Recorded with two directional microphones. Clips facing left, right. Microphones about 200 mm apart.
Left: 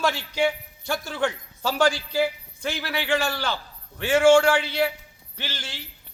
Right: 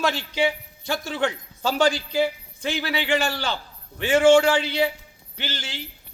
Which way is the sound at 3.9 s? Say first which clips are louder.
Right 1 dB; 5° left (ahead or behind).